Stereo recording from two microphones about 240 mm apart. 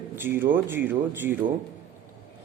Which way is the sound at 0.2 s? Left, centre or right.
Centre.